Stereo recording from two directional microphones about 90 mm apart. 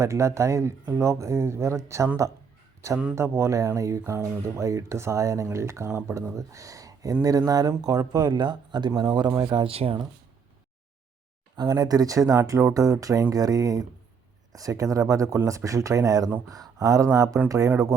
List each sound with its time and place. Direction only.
0.0 s speech: 30° right (ahead or behind)
3.2 s speech: 30° right (ahead or behind); by 9.6 s 50° right (ahead or behind)
9.6 s speech: 90° right
11.5 s speech: 50° right (ahead or behind)